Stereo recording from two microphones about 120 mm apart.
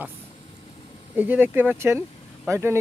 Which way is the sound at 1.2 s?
15° right (ahead or behind).